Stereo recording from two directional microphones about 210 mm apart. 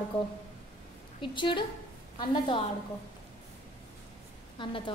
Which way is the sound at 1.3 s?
20° left (ahead or behind).